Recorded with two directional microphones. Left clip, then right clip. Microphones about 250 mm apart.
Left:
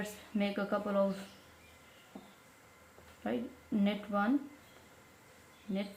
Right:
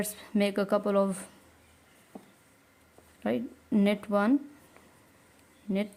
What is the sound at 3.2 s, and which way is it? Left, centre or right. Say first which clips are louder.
Speech: right 6 dB; right.